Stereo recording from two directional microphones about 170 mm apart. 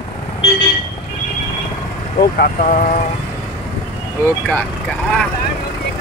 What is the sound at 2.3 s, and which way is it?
Speech, 60° left (ahead or behind).